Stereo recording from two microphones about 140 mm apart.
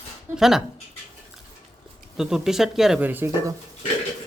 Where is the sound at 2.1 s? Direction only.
5° right (ahead or behind).